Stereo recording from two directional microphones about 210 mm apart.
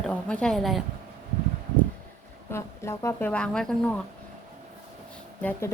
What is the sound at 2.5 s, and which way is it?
A woman's voice, 15° left (ahead or behind).